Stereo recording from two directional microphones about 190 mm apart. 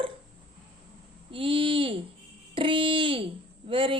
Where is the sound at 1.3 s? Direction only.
30° right (ahead or behind).